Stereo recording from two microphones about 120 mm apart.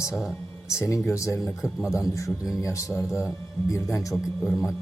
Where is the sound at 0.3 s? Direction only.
25° left (ahead or behind).